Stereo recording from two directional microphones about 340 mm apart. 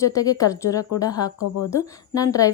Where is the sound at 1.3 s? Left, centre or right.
Left.